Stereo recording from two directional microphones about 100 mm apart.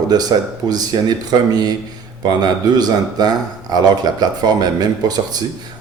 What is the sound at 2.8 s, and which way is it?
Speech, 40° right (ahead or behind).